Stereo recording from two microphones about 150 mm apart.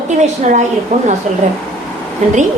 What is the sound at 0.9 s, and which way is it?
Speech, 50° right (ahead or behind).